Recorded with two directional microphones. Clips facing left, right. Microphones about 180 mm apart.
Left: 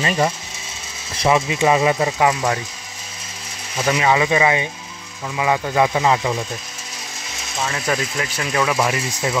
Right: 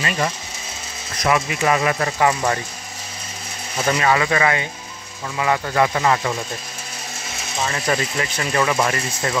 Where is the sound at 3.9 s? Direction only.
15° left (ahead or behind).